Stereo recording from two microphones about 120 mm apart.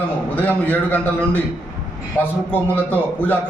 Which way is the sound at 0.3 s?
10° left (ahead or behind).